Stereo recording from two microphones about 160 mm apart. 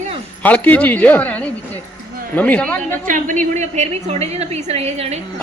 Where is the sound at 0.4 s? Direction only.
10° left (ahead or behind).